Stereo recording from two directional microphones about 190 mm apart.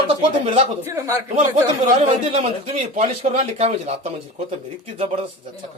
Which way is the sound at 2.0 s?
30° right (ahead or behind).